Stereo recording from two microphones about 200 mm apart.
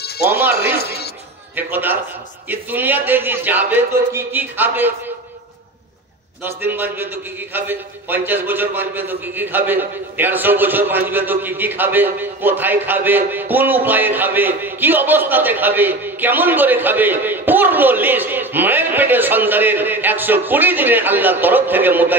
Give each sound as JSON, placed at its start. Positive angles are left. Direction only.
{"t": 0.3, "sound": "a man's voice", "side_deg": -10}
{"t": 6.4, "sound": "a man's voice", "side_deg": -10}